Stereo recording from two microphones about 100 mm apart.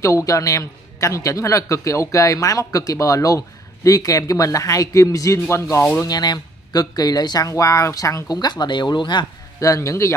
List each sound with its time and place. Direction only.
0.0 s a man's voice: 35° left (ahead or behind)
6.0 s a man's voice: 45° left (ahead or behind)
9.6 s speech: 30° left (ahead or behind)